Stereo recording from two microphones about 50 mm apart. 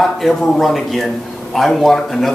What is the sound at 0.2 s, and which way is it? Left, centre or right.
Speech, centre.